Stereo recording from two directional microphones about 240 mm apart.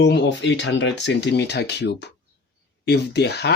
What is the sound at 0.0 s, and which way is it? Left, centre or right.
Speech, left.